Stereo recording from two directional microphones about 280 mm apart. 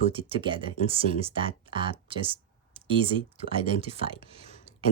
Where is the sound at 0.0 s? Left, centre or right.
Centre.